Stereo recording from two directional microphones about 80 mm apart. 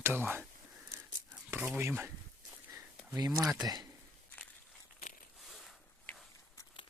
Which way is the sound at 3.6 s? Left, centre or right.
Right.